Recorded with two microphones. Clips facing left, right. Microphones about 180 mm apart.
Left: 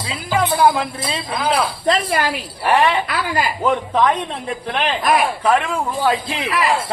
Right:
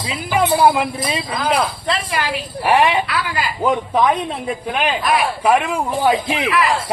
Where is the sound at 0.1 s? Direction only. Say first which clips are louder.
Right 2 dB; 15° right (ahead or behind).